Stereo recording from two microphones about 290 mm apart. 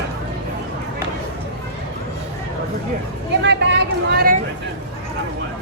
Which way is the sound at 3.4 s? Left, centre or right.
Right.